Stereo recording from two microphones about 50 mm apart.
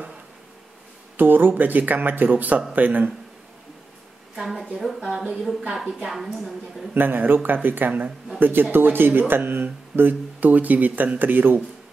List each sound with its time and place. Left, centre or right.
1.1 s speech: right
4.7 s a woman's voice: centre
6.9 s speech: right